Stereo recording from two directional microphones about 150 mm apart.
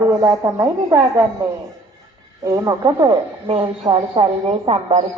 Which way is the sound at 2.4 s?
20° right (ahead or behind).